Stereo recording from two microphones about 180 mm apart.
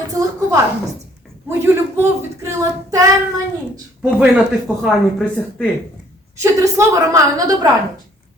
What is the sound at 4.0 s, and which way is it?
A man's voice, 5° right (ahead or behind).